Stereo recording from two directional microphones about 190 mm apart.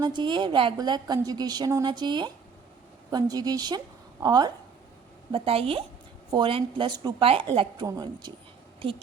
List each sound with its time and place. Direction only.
0.0 s a woman's voice: 25° right (ahead or behind)